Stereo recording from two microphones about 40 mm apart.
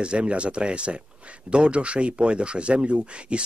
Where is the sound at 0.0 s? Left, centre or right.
Right.